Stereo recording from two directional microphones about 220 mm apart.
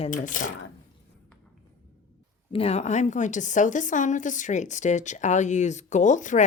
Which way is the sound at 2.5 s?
30° left (ahead or behind).